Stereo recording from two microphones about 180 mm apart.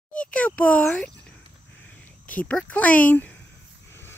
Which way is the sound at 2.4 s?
5° left (ahead or behind).